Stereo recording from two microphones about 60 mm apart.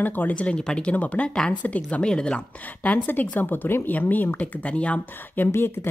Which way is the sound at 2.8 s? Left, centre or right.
Left.